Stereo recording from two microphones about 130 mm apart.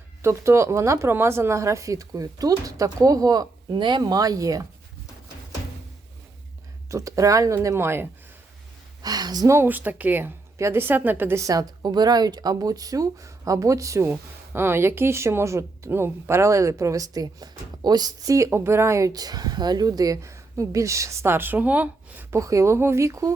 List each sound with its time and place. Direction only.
0.2 s speech: 20° right (ahead or behind)
6.9 s speech: 25° right (ahead or behind)
9.0 s speech: 30° right (ahead or behind)